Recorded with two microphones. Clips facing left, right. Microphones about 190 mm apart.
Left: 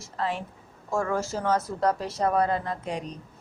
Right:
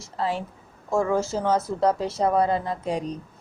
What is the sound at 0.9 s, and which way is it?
A woman's voice, 20° right (ahead or behind).